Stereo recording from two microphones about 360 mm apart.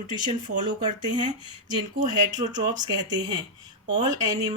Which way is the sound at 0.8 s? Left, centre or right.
Centre.